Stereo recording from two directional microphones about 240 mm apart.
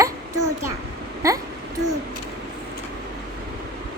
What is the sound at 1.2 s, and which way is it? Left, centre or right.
Speech, centre.